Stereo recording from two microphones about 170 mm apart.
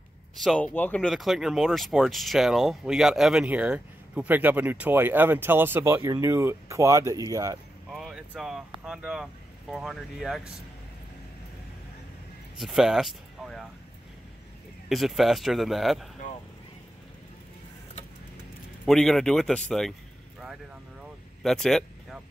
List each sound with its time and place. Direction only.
0.4 s speech: 5° left (ahead or behind); by 7.5 s 20° right (ahead or behind)
7.9 s speech: centre (ahead or behind)
12.5 s speech: centre (ahead or behind)
14.9 s speech: centre (ahead or behind)
18.9 s speech: centre (ahead or behind)
21.0 s vehicle: centre (ahead or behind)